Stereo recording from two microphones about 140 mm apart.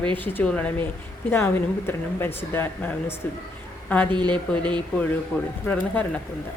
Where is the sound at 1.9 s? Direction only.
15° left (ahead or behind).